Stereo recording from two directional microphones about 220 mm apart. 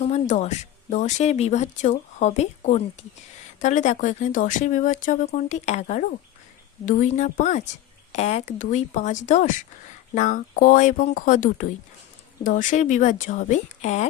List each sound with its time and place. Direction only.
0.0 s speech: 30° left (ahead or behind)